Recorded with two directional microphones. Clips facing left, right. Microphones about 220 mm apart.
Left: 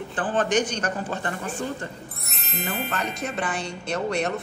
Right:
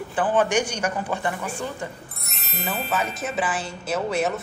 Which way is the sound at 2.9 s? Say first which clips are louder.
Right 2 dB; 5° right (ahead or behind).